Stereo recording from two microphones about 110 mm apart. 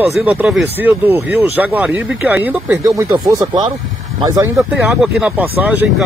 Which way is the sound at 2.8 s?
30° right (ahead or behind).